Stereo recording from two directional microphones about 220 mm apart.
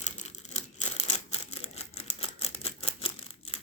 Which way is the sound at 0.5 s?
30° left (ahead or behind).